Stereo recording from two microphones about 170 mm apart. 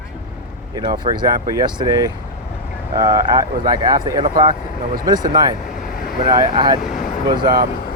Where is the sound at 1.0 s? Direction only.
25° right (ahead or behind).